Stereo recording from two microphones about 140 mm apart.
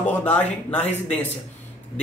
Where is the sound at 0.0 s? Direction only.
10° left (ahead or behind).